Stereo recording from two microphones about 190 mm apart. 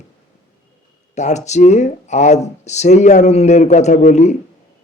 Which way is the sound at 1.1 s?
40° left (ahead or behind).